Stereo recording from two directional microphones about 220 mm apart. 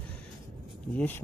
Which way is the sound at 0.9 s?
10° left (ahead or behind).